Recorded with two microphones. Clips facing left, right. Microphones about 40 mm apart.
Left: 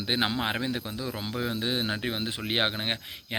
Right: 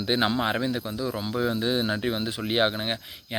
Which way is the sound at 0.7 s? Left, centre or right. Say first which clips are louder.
Right 4 dB; left.